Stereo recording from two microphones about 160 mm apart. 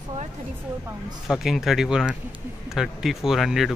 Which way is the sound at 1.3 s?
Centre (ahead or behind).